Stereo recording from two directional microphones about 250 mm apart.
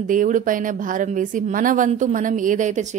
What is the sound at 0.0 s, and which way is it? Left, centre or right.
Speech, right.